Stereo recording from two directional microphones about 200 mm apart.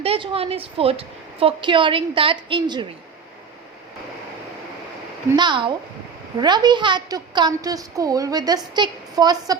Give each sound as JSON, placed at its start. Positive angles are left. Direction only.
{"t": 0.0, "sound": "a woman's voice", "side_deg": -30}
{"t": 5.4, "sound": "a woman's voice", "side_deg": -25}